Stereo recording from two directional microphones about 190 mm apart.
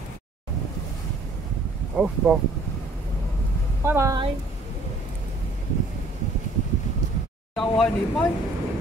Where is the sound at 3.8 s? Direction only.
15° right (ahead or behind).